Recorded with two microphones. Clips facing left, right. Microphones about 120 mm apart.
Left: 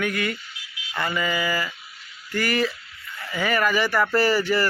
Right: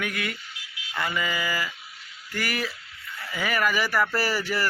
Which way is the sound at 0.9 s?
5° right (ahead or behind).